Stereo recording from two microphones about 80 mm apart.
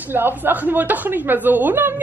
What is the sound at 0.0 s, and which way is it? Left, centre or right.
A woman's voice, right.